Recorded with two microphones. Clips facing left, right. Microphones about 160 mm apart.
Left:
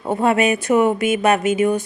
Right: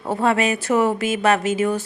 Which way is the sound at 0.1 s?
20° left (ahead or behind).